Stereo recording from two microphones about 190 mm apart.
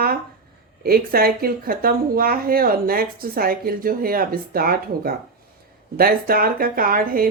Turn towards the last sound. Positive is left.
turn(degrees=-50)  # may be behind; listen again after turning